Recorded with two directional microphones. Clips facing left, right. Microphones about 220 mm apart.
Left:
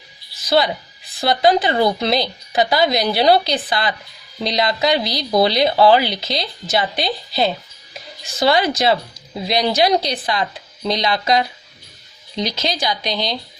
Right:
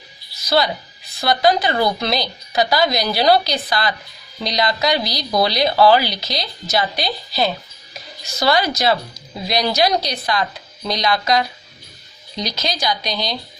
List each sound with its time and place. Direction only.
0.4 s speech: 25° left (ahead or behind)